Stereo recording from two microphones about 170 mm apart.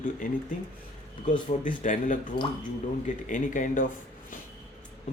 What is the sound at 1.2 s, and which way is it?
Speech, 50° left (ahead or behind).